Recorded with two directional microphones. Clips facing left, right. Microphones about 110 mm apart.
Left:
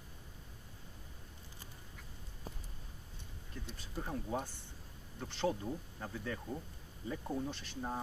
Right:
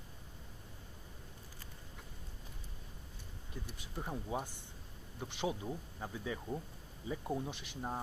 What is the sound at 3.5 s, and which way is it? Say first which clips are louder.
Speech: left 1 dB; 15° right (ahead or behind).